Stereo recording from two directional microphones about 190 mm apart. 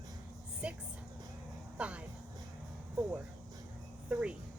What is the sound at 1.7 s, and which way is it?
Speech, 5° right (ahead or behind).